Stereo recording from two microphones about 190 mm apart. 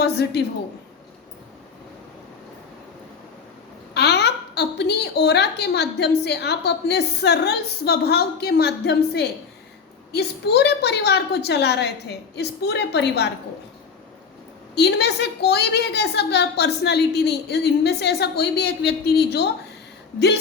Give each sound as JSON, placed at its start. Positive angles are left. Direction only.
{"t": 0.0, "sound": "a woman's voice", "side_deg": 60}
{"t": 3.9, "sound": "a woman's voice", "side_deg": 60}
{"t": 14.8, "sound": "a woman's voice", "side_deg": 60}